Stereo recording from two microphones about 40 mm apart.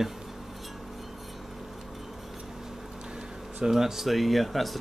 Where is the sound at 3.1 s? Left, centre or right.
Centre.